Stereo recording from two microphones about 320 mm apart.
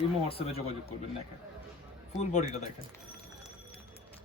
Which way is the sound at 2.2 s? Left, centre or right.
Left.